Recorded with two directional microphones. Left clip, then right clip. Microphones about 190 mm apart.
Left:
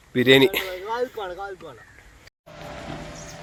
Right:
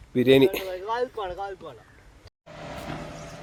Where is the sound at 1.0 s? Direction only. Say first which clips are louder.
Left 1 dB; 65° left (ahead or behind).